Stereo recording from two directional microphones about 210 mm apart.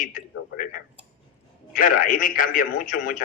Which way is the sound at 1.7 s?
40° left (ahead or behind).